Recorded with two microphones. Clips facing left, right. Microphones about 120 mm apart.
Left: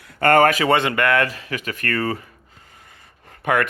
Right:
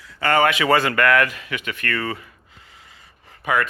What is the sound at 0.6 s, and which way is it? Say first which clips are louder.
Speech: right 1 dB; 20° left (ahead or behind).